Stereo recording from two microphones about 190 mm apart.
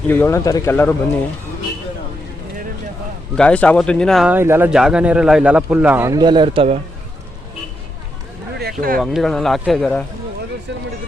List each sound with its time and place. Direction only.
0.1 s speech: 10° left (ahead or behind)
3.3 s a man's voice: 5° left (ahead or behind); by 6.7 s 30° right (ahead or behind)
8.5 s a sound: 55° right (ahead or behind)
9.0 s speech: centre (ahead or behind)